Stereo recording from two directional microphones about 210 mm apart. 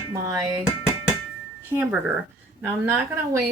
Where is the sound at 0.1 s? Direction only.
15° right (ahead or behind).